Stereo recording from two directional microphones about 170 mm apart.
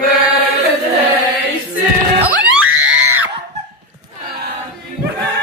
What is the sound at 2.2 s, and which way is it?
Screaming, 10° right (ahead or behind).